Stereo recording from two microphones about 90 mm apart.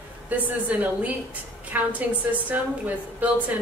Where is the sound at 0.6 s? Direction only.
15° right (ahead or behind).